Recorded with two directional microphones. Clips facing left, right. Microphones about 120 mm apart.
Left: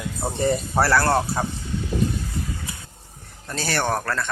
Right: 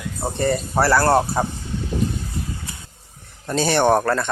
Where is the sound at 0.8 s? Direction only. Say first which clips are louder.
Right 4 dB; 5° right (ahead or behind).